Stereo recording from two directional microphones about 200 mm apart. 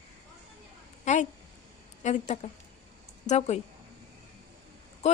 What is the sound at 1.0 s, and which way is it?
Speech, 35° left (ahead or behind).